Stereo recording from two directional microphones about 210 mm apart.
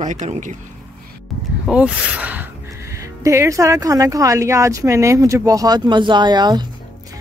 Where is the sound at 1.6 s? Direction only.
5° right (ahead or behind).